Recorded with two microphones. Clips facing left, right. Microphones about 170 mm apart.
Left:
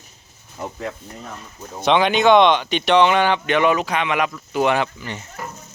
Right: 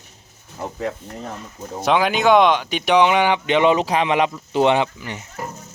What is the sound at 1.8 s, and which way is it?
Speech, 5° right (ahead or behind).